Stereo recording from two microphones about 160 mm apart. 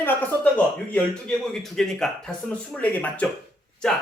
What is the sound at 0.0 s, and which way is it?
Speech, 10° left (ahead or behind).